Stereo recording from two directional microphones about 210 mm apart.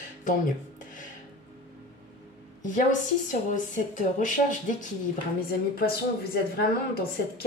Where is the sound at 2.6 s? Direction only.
35° left (ahead or behind).